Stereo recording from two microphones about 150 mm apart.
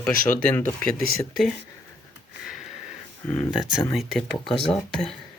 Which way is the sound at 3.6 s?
25° left (ahead or behind).